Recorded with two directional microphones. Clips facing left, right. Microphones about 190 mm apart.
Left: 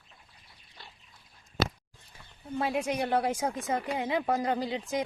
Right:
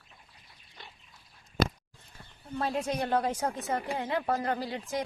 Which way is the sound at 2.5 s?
10° left (ahead or behind).